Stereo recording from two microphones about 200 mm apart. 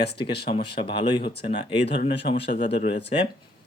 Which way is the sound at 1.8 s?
60° left (ahead or behind).